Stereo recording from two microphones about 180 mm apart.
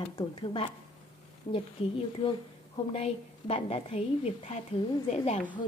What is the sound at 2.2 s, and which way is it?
A woman's voice, 30° left (ahead or behind).